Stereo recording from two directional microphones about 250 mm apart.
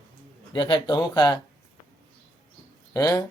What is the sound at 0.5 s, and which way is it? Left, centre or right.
Speech, centre.